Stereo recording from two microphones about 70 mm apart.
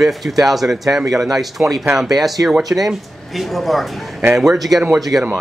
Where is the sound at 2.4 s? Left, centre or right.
Right.